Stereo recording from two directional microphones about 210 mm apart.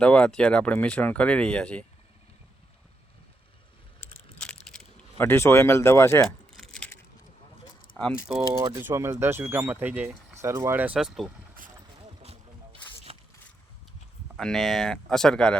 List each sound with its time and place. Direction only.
0.0 s speech: 5° left (ahead or behind)
5.1 s speech: 10° left (ahead or behind)
6.2 s crumpling: centre (ahead or behind)
6.7 s a sound: 10° left (ahead or behind)
7.9 s speech: centre (ahead or behind)
8.6 s speech: 10° right (ahead or behind)
13.1 s a sound: 25° right (ahead or behind)
14.3 s speech: centre (ahead or behind)